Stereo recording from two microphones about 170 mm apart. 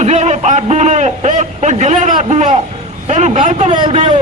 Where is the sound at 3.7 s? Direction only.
30° right (ahead or behind).